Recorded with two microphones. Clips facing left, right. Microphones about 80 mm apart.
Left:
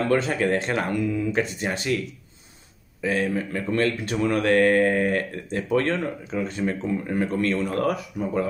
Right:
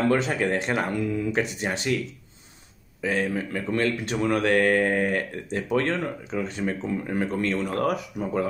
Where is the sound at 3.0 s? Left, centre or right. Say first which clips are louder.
Left 1 dB; right.